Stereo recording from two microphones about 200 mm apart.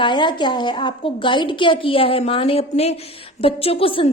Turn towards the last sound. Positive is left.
turn(degrees=25)  # may be behind; listen again after turning